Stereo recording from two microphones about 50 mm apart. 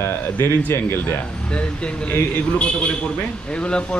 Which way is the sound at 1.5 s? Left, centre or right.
Left.